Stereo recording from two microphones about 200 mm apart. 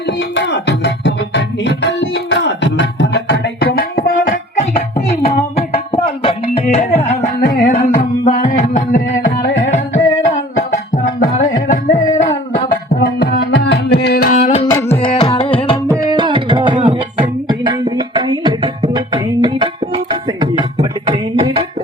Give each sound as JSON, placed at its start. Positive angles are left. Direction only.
{"t": 0.2, "sound": "music", "side_deg": 60}
{"t": 4.9, "sound": "a sound", "side_deg": 35}
{"t": 5.9, "sound": "tabla", "side_deg": 25}
{"t": 7.7, "sound": "music", "side_deg": 35}
{"t": 10.2, "sound": "music", "side_deg": 35}
{"t": 12.6, "sound": "music", "side_deg": 50}
{"t": 14.7, "sound": "music", "side_deg": 15}
{"t": 14.9, "sound": "music", "side_deg": 25}
{"t": 15.9, "sound": "music", "side_deg": -20}